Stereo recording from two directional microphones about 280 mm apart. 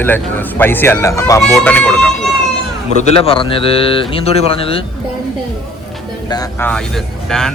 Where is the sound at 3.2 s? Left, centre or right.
Centre.